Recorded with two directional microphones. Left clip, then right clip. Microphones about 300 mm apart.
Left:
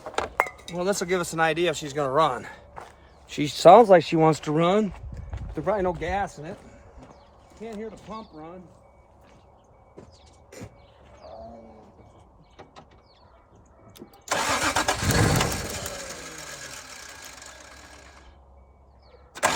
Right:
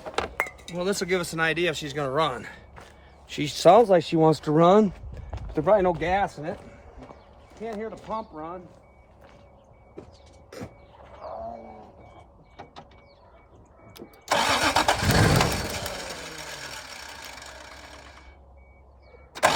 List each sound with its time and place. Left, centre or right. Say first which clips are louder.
0.3 s speech: left 3 dB; centre
5.5 s speech: right 5 dB; right
14.3 s vehicle: right 2 dB; centre